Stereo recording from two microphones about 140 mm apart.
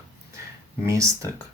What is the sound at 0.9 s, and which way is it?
Speech, 20° right (ahead or behind).